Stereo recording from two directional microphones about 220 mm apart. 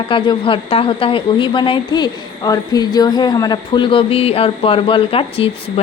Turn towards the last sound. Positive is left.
turn(degrees=25)  # may be behind; listen again after turning